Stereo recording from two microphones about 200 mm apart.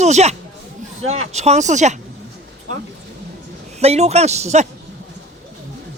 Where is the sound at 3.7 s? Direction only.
30° right (ahead or behind).